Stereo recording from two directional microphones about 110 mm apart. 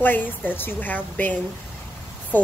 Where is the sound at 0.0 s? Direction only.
15° left (ahead or behind).